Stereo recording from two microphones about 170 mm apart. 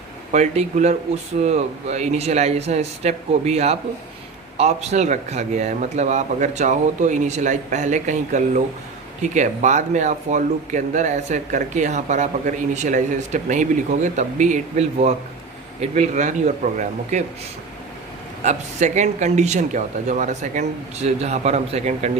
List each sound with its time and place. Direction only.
0.3 s speech: 45° right (ahead or behind)
18.4 s speech: 45° right (ahead or behind)